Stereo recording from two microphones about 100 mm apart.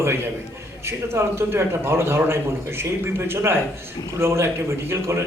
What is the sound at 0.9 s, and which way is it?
A man's voice, 25° right (ahead or behind).